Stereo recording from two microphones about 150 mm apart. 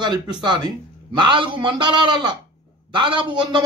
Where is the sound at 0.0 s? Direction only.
30° right (ahead or behind).